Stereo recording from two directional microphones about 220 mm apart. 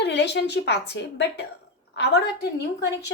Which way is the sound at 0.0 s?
50° left (ahead or behind).